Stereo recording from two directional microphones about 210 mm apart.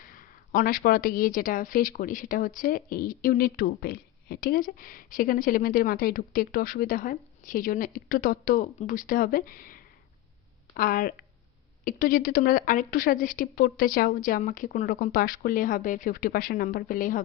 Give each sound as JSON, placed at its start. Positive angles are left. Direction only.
{"t": 0.0, "sound": "a woman's voice", "side_deg": 40}